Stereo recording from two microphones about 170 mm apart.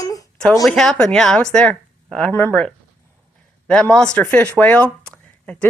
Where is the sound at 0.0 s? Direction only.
20° left (ahead or behind).